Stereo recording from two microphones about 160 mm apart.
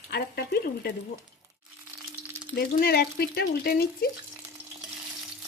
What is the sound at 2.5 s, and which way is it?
Speech, 75° left (ahead or behind).